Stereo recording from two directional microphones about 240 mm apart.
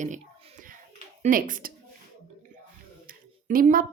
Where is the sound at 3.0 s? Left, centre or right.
Right.